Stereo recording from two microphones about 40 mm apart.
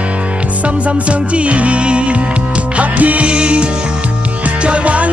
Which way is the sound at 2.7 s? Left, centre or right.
Right.